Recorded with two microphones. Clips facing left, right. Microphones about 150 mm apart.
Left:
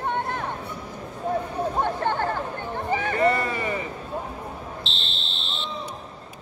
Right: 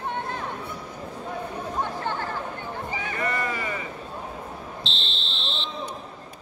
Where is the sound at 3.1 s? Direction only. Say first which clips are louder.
Left 6 dB; 30° left (ahead or behind).